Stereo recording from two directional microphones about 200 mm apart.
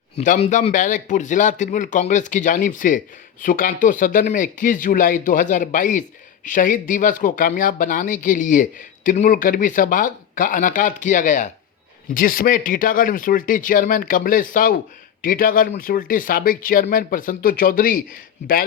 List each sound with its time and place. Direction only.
0.2 s speech: 40° left (ahead or behind)